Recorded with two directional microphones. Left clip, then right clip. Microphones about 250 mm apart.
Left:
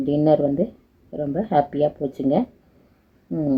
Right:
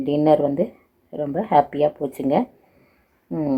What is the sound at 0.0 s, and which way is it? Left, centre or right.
Speech, right.